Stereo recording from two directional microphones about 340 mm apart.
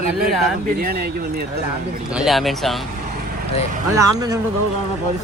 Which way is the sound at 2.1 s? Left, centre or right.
Centre.